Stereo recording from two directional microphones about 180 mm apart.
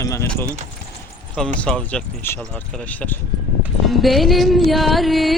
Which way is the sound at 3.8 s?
Centre (ahead or behind).